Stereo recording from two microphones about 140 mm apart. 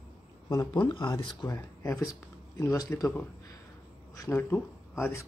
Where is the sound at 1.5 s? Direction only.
20° left (ahead or behind).